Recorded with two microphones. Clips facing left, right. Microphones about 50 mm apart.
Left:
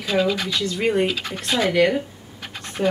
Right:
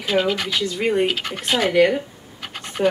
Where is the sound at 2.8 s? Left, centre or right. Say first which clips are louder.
Right 2 dB; centre.